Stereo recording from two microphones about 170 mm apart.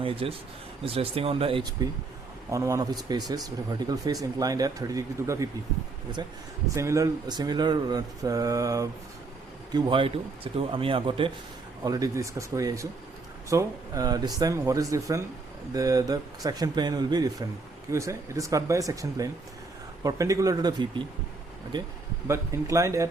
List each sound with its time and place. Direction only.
0.0 s speech: 35° right (ahead or behind)
2.5 s speech: 20° right (ahead or behind)